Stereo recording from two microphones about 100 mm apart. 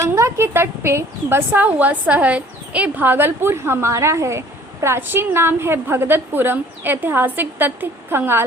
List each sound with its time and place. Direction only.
0.0 s a woman's voice: 30° right (ahead or behind)